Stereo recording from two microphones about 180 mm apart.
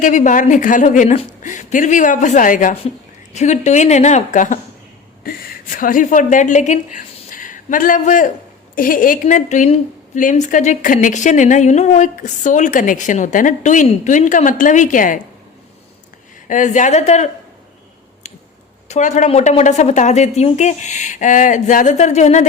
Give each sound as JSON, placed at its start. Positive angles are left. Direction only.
{"t": 0.0, "sound": "a woman's voice", "side_deg": 45}
{"t": 16.5, "sound": "speech", "side_deg": 45}
{"t": 18.9, "sound": "a woman's voice", "side_deg": 40}